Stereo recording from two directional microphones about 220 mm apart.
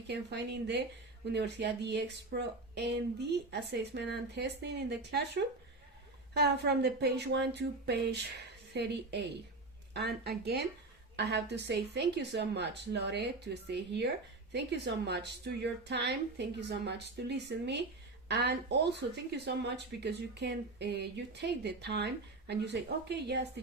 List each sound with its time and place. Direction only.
0.1 s speech: 50° right (ahead or behind)